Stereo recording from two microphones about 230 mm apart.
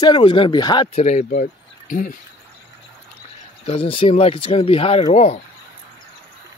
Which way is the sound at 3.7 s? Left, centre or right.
Left.